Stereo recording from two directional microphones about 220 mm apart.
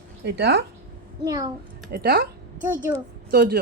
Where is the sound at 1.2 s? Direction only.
15° right (ahead or behind).